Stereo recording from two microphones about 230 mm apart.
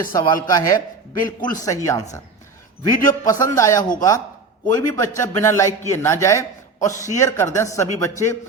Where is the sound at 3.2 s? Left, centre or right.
Centre.